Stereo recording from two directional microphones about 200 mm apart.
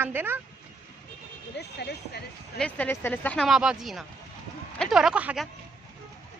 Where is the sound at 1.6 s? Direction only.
55° left (ahead or behind).